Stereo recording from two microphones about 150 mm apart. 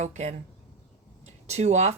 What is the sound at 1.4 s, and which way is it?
Speech, 50° right (ahead or behind).